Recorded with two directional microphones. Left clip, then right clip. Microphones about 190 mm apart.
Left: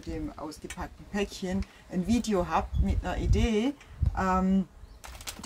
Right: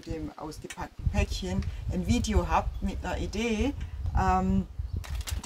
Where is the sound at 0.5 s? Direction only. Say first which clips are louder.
Even; 10° right (ahead or behind).